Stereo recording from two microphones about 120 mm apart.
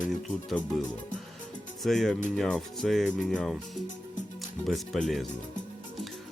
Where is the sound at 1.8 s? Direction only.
Centre (ahead or behind).